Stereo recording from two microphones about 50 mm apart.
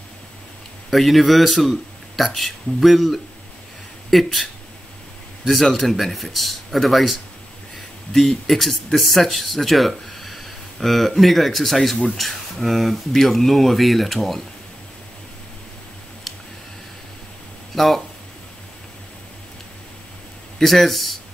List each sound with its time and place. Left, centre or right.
0.8 s speech: centre
17.7 s speech: centre
20.6 s speech: centre